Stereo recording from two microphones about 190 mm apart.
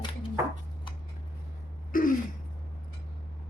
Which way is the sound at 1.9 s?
45° left (ahead or behind).